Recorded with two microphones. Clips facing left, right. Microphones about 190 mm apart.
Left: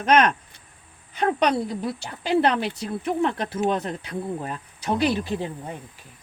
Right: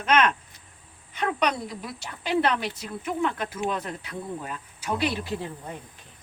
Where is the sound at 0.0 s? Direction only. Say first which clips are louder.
Left 4 dB; 40° left (ahead or behind).